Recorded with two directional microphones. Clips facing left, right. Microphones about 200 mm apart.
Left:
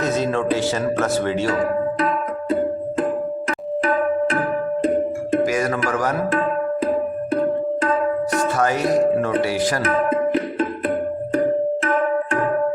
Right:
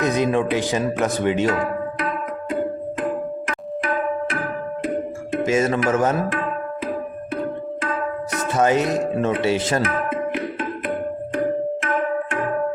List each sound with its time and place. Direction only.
0.0 s speech: 15° right (ahead or behind)
5.4 s music: 25° right (ahead or behind)
8.4 s music: 20° right (ahead or behind)
9.8 s tabla: 35° left (ahead or behind)